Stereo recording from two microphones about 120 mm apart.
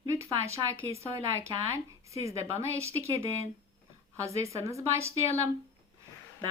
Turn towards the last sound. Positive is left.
turn(degrees=-25)  # may be behind; listen again after turning